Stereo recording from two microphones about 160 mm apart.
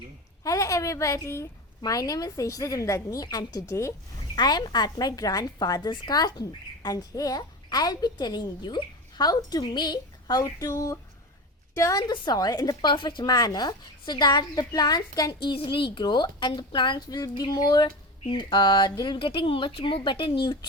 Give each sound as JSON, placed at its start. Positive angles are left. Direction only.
{"t": 0.4, "sound": "a woman's voice", "side_deg": 20}